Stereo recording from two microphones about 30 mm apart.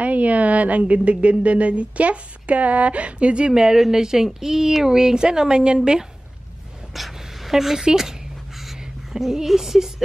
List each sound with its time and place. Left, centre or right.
0.0 s a woman's voice: right
3.7 s a woman's voice: centre
6.9 s a sound: centre
7.5 s a woman's voice: centre
9.1 s speech: centre